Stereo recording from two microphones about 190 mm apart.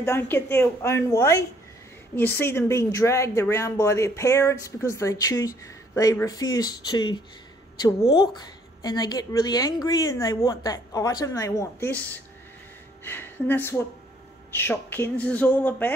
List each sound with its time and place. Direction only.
0.0 s a woman's voice: 10° left (ahead or behind)